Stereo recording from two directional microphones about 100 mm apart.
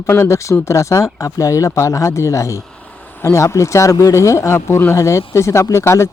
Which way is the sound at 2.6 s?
10° left (ahead or behind).